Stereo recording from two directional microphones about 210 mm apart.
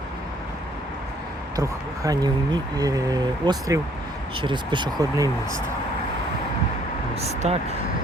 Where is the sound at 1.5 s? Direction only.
15° right (ahead or behind).